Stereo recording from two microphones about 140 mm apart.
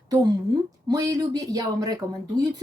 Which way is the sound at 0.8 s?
25° right (ahead or behind).